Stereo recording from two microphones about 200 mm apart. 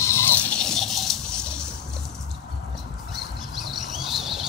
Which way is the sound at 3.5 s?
Centre (ahead or behind).